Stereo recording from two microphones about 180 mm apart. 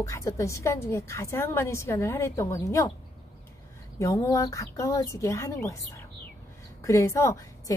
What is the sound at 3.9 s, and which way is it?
Speech, 15° left (ahead or behind).